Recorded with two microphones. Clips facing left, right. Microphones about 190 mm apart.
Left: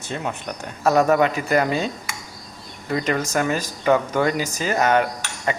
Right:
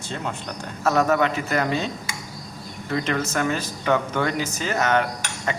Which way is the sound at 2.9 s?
10° left (ahead or behind).